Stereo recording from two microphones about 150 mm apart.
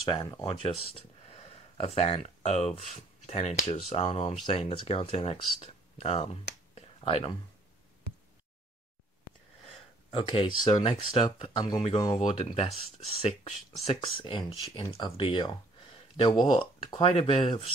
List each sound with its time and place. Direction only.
0.1 s speech: 35° left (ahead or behind)
10.1 s speech: 35° left (ahead or behind)
12.4 s speech: 40° left (ahead or behind)